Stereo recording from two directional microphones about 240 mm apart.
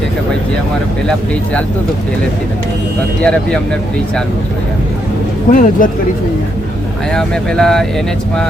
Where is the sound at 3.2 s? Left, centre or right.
Centre.